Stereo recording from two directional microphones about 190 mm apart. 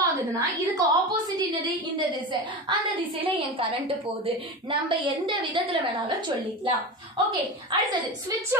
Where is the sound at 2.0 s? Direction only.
25° right (ahead or behind).